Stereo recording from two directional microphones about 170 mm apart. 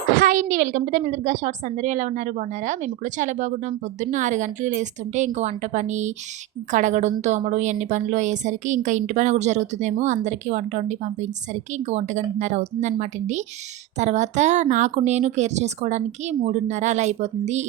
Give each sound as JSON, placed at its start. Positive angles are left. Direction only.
{"t": 0.1, "sound": "a woman's voice", "side_deg": -55}